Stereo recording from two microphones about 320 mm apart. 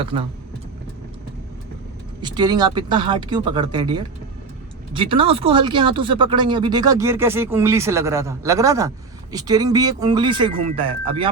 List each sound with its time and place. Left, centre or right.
0.0 s speech: centre
2.2 s speech: centre